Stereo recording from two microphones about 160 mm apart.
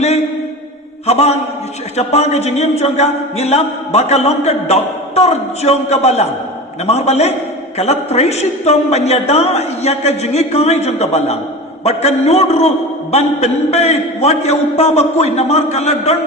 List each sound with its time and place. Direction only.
1.0 s a man's voice: 40° left (ahead or behind)